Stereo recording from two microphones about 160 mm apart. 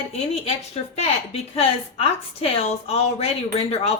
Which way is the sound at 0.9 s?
40° left (ahead or behind).